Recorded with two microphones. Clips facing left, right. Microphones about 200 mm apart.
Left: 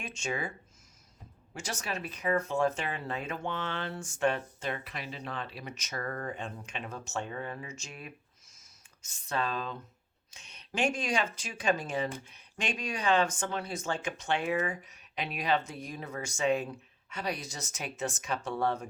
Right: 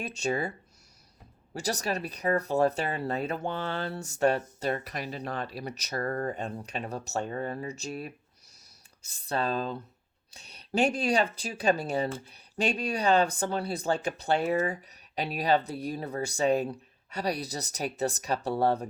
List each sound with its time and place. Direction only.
0.0 s speech: 35° right (ahead or behind)
1.5 s speech: 40° right (ahead or behind)
8.5 s a sound: 35° right (ahead or behind)
10.3 s speech: 35° right (ahead or behind)